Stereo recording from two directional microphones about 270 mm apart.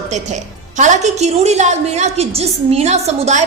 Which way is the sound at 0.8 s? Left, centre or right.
Right.